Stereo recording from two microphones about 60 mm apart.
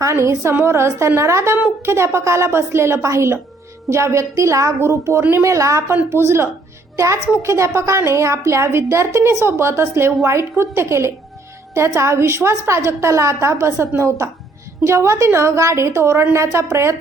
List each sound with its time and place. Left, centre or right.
0.1 s a woman's voice: right
4.8 s a woman's voice: right
6.1 s a woman's voice: right